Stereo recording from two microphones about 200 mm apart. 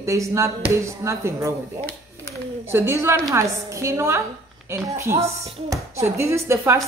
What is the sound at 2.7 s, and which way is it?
A man's voice, 10° right (ahead or behind).